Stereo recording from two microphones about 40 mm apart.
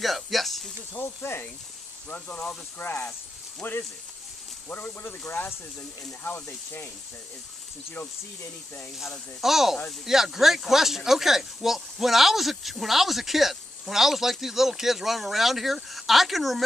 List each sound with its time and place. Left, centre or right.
0.0 s speech: centre
0.9 s speech: left
2.9 s speech: left
3.6 s speech: left
5.0 s speech: left
9.4 s speech: centre